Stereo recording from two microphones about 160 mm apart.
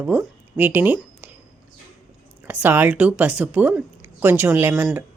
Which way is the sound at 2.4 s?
10° right (ahead or behind).